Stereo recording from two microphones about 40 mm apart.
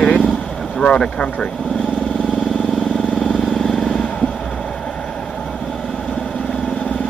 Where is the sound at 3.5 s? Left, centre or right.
Centre.